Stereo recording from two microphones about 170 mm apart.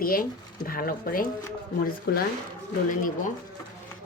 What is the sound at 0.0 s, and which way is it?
Speech, 60° left (ahead or behind).